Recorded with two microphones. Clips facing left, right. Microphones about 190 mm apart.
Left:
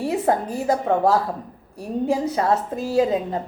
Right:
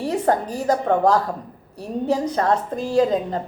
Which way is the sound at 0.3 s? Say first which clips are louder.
Right 2 dB; 40° right (ahead or behind).